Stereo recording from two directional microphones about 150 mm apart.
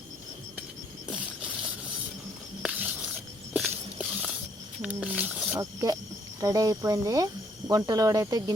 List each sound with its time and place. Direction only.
2.6 s a sound: 5° right (ahead or behind)
4.8 s speech: 10° right (ahead or behind)
5.5 s cricket: 25° right (ahead or behind)